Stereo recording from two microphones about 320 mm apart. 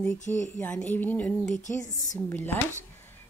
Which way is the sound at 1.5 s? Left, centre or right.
Left.